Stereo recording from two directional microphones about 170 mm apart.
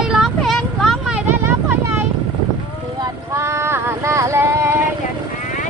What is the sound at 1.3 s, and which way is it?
Vehicle, 10° right (ahead or behind).